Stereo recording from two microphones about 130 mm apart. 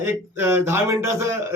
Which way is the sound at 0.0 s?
20° right (ahead or behind).